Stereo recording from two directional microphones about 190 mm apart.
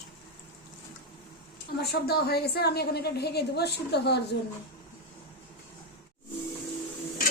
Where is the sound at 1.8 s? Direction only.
55° left (ahead or behind).